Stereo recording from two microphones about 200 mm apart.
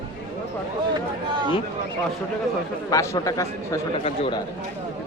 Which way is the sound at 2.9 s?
15° left (ahead or behind).